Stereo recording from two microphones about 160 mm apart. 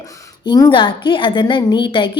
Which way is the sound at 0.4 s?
25° left (ahead or behind).